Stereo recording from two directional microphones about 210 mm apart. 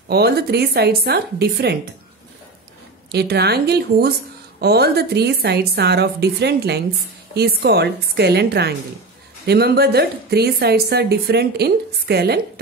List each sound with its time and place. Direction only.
0.1 s a woman's voice: 50° right (ahead or behind)
3.1 s a woman's voice: 50° right (ahead or behind)